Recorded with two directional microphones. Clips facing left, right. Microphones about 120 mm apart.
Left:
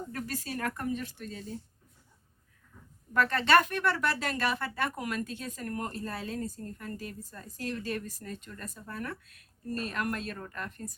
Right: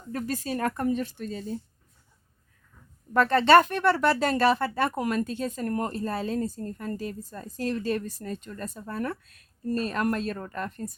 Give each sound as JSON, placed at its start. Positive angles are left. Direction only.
{"t": 0.1, "sound": "speech", "side_deg": -25}
{"t": 3.1, "sound": "speech", "side_deg": -30}